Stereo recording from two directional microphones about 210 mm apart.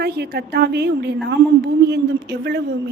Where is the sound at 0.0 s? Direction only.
50° right (ahead or behind).